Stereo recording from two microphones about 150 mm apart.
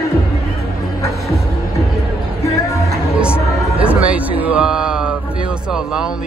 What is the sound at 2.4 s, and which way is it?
Music, 20° left (ahead or behind).